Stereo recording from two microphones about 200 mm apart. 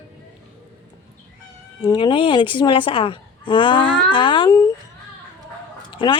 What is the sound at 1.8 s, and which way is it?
A woman's voice, 20° left (ahead or behind).